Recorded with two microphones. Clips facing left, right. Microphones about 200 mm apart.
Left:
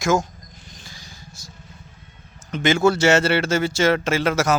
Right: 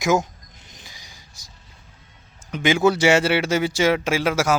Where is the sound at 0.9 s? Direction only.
15° right (ahead or behind).